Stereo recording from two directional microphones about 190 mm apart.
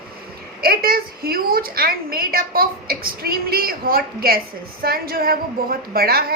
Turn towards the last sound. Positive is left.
turn(degrees=-55)  # may be behind; listen again after turning